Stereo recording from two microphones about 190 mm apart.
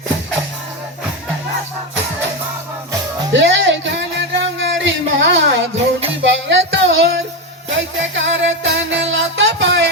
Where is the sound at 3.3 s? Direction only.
75° right (ahead or behind).